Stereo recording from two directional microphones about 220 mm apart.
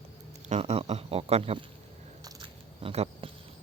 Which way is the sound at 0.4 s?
30° right (ahead or behind).